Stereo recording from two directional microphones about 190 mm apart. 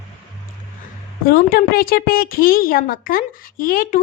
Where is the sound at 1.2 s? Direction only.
50° left (ahead or behind).